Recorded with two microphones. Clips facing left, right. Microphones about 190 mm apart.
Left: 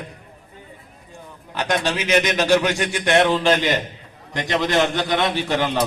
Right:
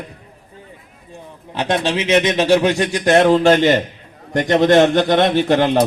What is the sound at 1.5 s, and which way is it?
A man's voice, 30° right (ahead or behind).